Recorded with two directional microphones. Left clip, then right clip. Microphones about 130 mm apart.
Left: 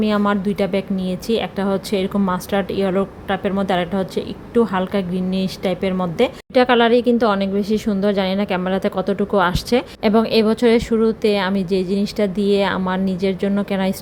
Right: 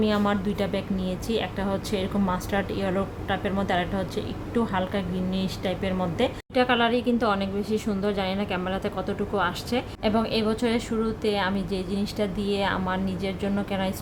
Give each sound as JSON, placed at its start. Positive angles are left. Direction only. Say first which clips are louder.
{"t": 0.0, "sound": "a woman's voice", "louder": "left 6 dB", "side_deg": 40}